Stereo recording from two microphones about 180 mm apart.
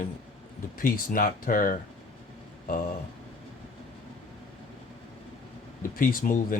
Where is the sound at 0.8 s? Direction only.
50° left (ahead or behind).